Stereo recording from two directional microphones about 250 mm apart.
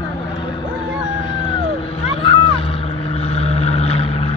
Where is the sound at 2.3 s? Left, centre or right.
Left.